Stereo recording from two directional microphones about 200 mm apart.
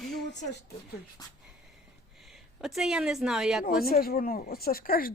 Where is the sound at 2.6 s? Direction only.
Centre (ahead or behind).